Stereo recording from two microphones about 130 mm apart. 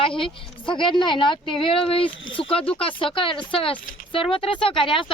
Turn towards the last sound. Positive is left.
turn(degrees=40)  # may be behind; listen again after turning